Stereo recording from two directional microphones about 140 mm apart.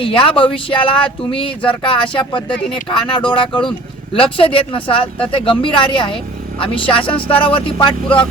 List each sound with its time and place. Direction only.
0.0 s speech: 40° left (ahead or behind)
7.0 s a sound: 10° left (ahead or behind)
7.4 s speech: 35° left (ahead or behind)